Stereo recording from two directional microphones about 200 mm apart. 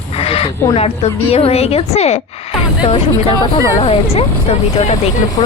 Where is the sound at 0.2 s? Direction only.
30° left (ahead or behind).